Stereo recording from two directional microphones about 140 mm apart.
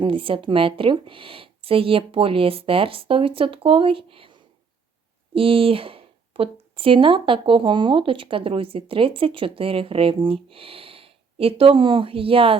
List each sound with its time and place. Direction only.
0.0 s speech: 40° right (ahead or behind)